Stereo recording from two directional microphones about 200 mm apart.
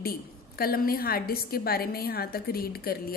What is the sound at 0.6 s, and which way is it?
Speech, 50° left (ahead or behind).